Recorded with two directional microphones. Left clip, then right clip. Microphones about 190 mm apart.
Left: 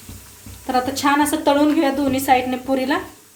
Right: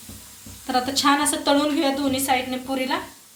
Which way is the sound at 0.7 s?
45° left (ahead or behind).